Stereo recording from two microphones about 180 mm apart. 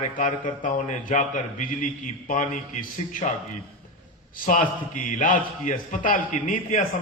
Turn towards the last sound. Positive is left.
turn(degrees=45)  # may be behind; listen again after turning